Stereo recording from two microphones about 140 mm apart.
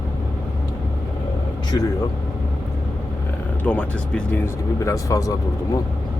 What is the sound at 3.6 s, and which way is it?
Speech, 10° left (ahead or behind).